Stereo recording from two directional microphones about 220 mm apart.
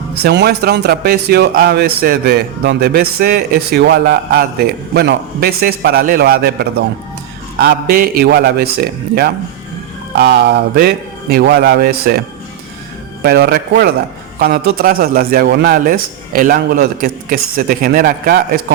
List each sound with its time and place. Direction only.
0.2 s speech: 50° right (ahead or behind)
13.2 s speech: 45° right (ahead or behind)